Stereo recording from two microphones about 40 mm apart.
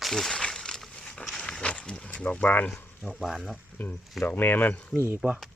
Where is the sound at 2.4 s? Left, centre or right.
Left.